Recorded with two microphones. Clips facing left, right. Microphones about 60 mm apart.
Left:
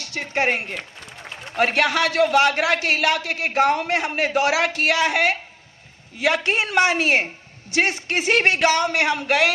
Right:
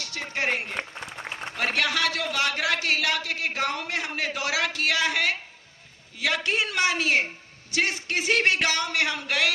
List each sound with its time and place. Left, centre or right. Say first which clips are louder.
0.0 s a man's voice: left 6 dB; left